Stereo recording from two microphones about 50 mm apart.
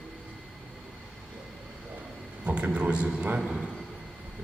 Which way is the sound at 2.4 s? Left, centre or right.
Right.